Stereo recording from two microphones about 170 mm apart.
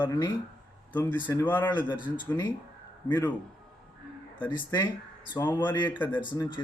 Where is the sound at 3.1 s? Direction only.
10° left (ahead or behind).